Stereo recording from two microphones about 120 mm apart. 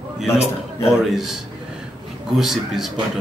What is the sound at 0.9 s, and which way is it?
Speech, 5° right (ahead or behind).